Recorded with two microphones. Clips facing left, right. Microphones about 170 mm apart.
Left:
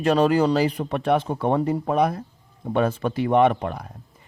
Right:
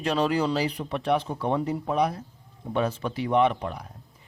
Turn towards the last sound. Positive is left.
turn(degrees=55)  # may be behind; listen again after turning